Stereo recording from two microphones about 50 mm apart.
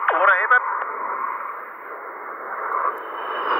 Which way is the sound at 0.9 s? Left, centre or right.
Left.